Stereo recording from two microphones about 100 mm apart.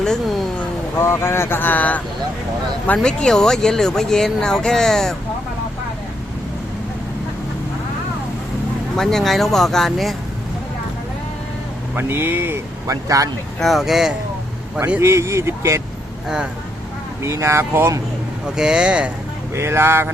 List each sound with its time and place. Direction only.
0.0 s a sound: 5° left (ahead or behind)
0.9 s speech: 25° left (ahead or behind); by 5.1 s 5° left (ahead or behind)
9.0 s speech: 5° left (ahead or behind)
11.9 s speech: 20° right (ahead or behind)
12.9 s speech: 35° right (ahead or behind)
13.6 s speech: centre (ahead or behind)
15.0 s speech: 30° right (ahead or behind)
17.2 s speech: 30° right (ahead or behind)
18.5 s speech: 5° right (ahead or behind)
19.5 s speech: 25° right (ahead or behind)